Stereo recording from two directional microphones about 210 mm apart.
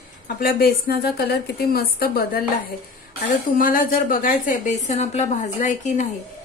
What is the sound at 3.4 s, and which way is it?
A woman's voice, 40° left (ahead or behind).